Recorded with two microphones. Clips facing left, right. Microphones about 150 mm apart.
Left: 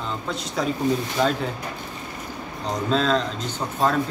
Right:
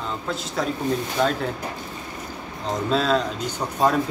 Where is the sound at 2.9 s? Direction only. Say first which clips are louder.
Even; 5° right (ahead or behind).